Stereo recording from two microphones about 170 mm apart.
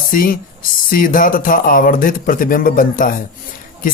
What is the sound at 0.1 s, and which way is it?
Speech, 55° left (ahead or behind).